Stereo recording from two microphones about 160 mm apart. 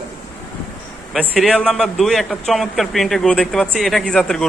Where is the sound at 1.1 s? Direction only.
Centre (ahead or behind).